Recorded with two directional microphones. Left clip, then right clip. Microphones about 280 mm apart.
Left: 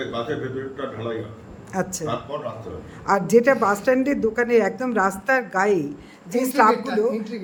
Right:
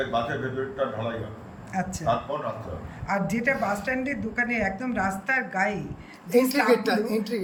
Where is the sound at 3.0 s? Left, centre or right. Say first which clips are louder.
Left 9 dB; centre.